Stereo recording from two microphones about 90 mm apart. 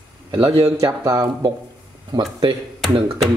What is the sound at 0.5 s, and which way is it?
Speech, 40° right (ahead or behind).